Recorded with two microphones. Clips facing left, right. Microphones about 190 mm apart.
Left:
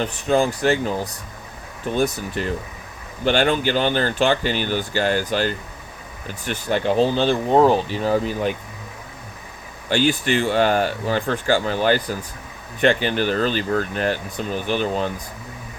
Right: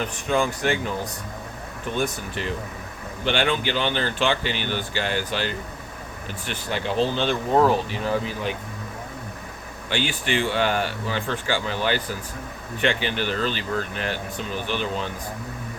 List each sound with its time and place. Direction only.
0.0 s speech: 35° left (ahead or behind)
2.0 s speech: 40° left (ahead or behind)
7.5 s speech: 30° left (ahead or behind)
9.9 s speech: 40° left (ahead or behind)